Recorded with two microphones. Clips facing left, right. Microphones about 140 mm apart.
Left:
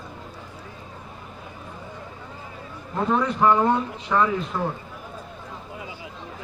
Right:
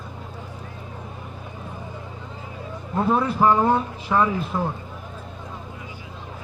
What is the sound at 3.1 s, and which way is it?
Speech, 10° right (ahead or behind).